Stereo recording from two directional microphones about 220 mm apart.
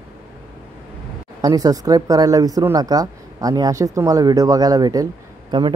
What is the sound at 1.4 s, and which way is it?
A man's voice, 15° right (ahead or behind).